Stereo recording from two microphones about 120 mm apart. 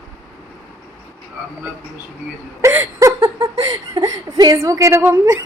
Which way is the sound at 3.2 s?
25° right (ahead or behind).